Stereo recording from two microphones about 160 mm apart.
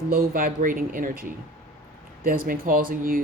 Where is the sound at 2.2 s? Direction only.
60° right (ahead or behind).